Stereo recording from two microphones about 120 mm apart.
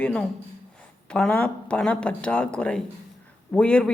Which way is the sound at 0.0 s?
5° left (ahead or behind).